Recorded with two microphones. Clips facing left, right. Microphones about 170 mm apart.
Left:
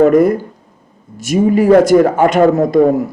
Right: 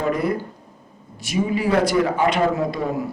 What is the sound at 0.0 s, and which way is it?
A man's voice, 45° left (ahead or behind).